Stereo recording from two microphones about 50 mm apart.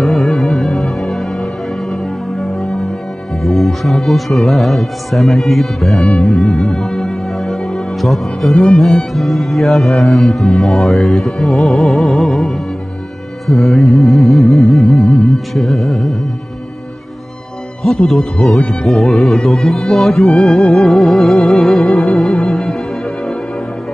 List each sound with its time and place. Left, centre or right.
0.0 s music: centre
3.4 s speech: centre
6.1 s music: centre
9.1 s speech: centre
17.8 s speech: centre
20.3 s music: centre